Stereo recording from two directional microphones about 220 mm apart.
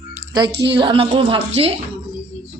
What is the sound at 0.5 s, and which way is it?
Speech, 50° right (ahead or behind).